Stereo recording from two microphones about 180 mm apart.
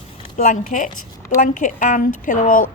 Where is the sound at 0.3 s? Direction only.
45° left (ahead or behind).